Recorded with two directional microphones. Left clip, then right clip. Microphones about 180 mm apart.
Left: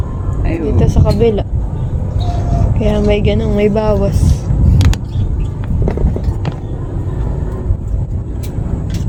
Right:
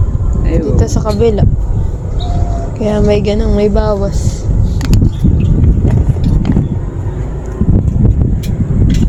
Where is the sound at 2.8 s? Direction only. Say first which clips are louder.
Right 2 dB; 15° right (ahead or behind).